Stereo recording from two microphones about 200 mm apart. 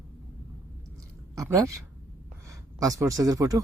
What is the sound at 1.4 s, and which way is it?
Speech, 15° right (ahead or behind).